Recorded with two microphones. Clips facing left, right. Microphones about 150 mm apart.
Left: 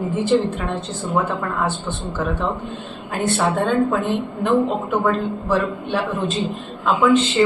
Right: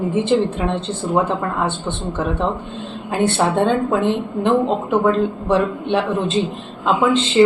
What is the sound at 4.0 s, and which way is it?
A woman's voice, 25° right (ahead or behind).